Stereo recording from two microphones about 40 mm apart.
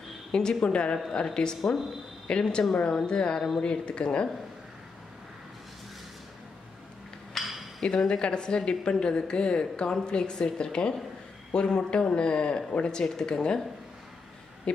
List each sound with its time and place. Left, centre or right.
0.3 s speech: left
7.3 s a sound: centre
7.8 s speech: left